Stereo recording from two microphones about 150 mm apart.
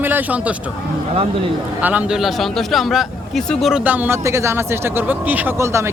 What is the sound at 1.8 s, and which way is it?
A man's voice, 10° right (ahead or behind).